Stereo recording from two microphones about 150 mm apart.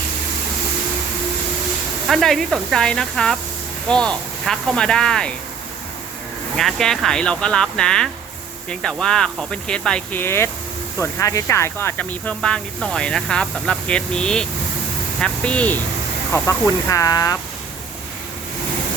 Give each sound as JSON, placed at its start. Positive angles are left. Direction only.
{"t": 2.0, "sound": "speech", "side_deg": 0}
{"t": 6.6, "sound": "speech", "side_deg": 0}
{"t": 16.3, "sound": "speech", "side_deg": 20}